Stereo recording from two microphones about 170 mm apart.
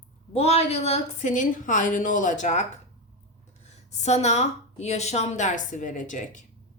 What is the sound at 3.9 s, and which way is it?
A woman's voice, 40° left (ahead or behind).